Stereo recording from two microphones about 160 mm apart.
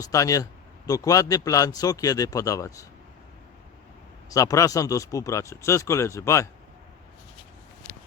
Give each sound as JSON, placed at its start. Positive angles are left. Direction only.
{"t": 0.0, "sound": "speech", "side_deg": 20}
{"t": 4.3, "sound": "speech", "side_deg": 20}